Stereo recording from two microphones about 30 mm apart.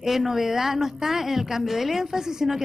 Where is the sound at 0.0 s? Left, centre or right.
Centre.